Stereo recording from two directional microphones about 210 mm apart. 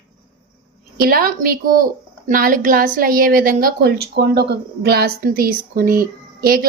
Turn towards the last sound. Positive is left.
turn(degrees=-45)  # may be behind; listen again after turning